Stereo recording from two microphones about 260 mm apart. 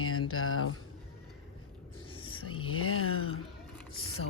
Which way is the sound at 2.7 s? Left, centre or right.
Left.